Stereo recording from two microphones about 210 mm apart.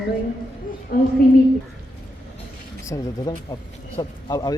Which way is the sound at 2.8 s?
15° left (ahead or behind).